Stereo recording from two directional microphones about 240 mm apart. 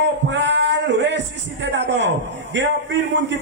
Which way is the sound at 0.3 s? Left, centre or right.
Right.